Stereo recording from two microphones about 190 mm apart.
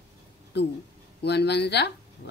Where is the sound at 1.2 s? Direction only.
60° left (ahead or behind).